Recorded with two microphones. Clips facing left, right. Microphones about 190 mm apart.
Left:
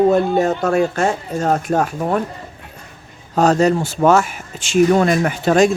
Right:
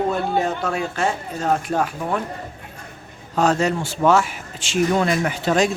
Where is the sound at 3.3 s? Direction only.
40° left (ahead or behind).